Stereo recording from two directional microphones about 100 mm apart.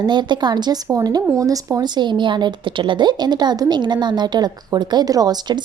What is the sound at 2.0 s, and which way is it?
A woman's voice, 50° right (ahead or behind).